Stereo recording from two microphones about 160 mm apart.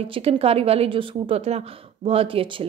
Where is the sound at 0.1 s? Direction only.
35° right (ahead or behind).